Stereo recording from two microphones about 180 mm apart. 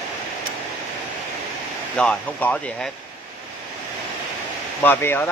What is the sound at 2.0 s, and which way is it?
Speech, 5° left (ahead or behind).